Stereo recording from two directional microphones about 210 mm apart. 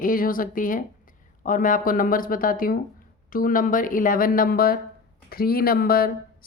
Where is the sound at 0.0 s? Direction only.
40° left (ahead or behind).